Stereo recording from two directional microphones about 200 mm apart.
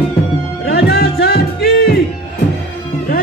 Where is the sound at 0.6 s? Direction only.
55° left (ahead or behind).